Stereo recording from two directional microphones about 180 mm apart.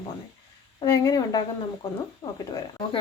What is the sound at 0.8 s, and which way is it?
Speech, 20° left (ahead or behind).